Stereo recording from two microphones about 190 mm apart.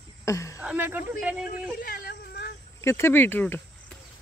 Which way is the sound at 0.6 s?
10° right (ahead or behind).